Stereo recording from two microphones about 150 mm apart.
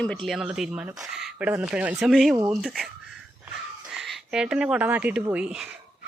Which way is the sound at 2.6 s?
Centre (ahead or behind).